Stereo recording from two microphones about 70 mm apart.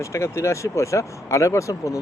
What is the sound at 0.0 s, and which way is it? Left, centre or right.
Speech, left.